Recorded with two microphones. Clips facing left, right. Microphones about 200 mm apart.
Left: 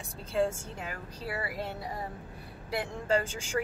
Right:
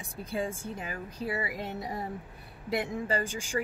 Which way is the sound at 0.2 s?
15° right (ahead or behind).